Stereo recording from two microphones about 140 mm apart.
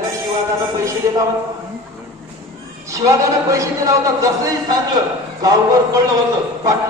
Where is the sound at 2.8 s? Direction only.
25° right (ahead or behind).